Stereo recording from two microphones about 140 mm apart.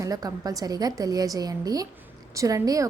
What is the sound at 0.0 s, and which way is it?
A woman's voice, 25° right (ahead or behind).